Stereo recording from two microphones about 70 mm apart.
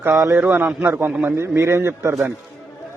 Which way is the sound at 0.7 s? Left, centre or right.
Right.